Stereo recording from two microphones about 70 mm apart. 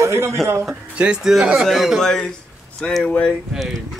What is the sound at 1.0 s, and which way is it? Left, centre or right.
Speech, centre.